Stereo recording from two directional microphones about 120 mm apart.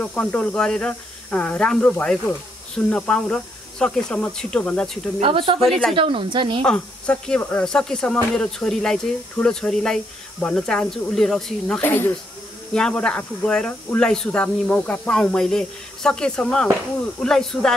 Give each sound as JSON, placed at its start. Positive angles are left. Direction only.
{"t": 0.0, "sound": "speech", "side_deg": 10}
{"t": 5.2, "sound": "a woman's voice", "side_deg": -50}
{"t": 5.7, "sound": "speech", "side_deg": 0}
{"t": 5.9, "sound": "a woman's voice", "side_deg": -45}
{"t": 6.6, "sound": "speech", "side_deg": 5}
{"t": 11.8, "sound": "speech", "side_deg": 15}